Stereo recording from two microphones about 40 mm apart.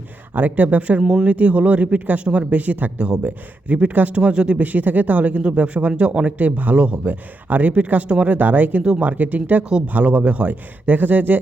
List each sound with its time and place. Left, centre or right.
0.3 s speech: right
2.2 s speech: right
2.5 s speech: right
4.2 s speech: right
4.6 s speech: right
6.7 s speech: right
7.0 s speech: right
8.3 s speech: right
10.5 s speech: right